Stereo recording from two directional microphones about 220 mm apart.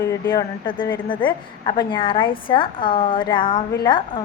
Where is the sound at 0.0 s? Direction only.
20° left (ahead or behind).